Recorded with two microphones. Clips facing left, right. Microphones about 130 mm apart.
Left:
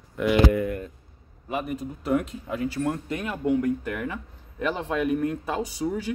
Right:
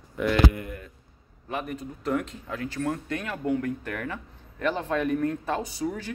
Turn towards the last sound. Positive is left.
turn(degrees=15)  # may be behind; listen again after turning